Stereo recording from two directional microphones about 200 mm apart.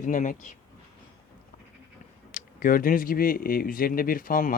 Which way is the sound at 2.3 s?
45° left (ahead or behind).